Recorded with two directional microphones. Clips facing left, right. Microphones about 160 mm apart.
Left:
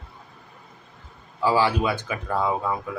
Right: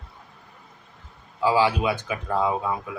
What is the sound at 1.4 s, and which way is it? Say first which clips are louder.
Speech: even; 15° right (ahead or behind).